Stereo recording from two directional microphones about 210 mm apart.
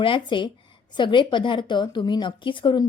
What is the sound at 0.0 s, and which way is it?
A woman's voice, 25° left (ahead or behind).